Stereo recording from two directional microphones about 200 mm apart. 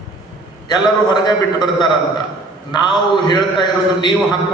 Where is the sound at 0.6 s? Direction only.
20° left (ahead or behind).